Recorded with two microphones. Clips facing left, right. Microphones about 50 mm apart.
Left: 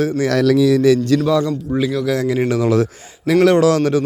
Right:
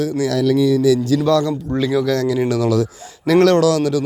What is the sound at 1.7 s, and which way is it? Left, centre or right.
Speech, centre.